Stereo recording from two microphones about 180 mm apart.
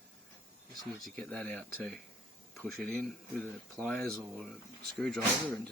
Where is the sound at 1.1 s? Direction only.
10° left (ahead or behind).